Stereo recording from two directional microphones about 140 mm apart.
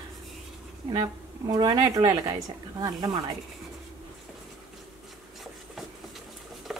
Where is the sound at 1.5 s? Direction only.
30° right (ahead or behind).